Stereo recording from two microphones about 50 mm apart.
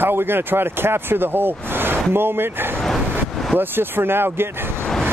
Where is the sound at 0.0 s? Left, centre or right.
Right.